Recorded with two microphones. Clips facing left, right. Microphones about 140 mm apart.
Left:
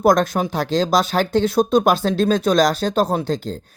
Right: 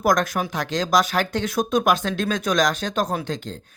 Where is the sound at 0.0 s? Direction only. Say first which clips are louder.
Left 5 dB; 30° left (ahead or behind).